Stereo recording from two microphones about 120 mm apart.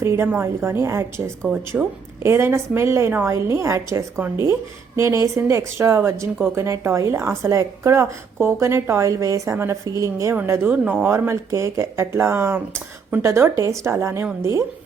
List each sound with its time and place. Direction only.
0.0 s a woman's voice: 20° right (ahead or behind)
1.7 s a woman's voice: 10° right (ahead or behind)
2.2 s a woman's voice: 20° right (ahead or behind)